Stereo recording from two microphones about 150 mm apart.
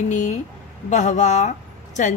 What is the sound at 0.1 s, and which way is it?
A woman's voice, 55° left (ahead or behind).